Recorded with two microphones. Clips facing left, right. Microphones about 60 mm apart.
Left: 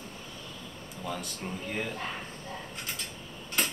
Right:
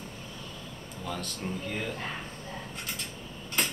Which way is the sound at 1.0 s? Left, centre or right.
Centre.